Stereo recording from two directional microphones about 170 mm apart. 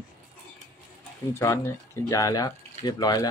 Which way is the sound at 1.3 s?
15° left (ahead or behind).